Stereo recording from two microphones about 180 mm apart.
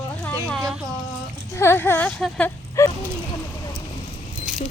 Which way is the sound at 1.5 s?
15° left (ahead or behind).